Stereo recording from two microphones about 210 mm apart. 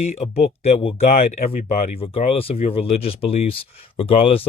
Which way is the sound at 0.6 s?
30° left (ahead or behind).